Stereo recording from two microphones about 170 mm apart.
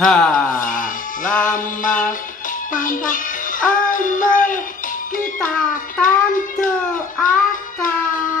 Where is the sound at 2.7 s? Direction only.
50° left (ahead or behind).